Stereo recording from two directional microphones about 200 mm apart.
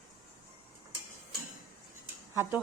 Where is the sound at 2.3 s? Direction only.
10° right (ahead or behind).